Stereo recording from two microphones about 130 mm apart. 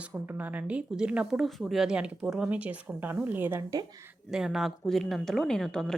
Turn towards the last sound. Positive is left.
turn(degrees=5)  # may be behind; listen again after turning